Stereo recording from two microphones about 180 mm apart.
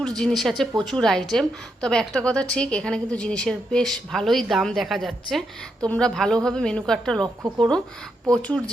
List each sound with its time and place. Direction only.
0.2 s a woman's voice: centre (ahead or behind)
8.3 s a woman's voice: 5° left (ahead or behind)